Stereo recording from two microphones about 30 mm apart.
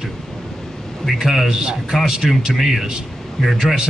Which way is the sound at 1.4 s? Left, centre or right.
Right.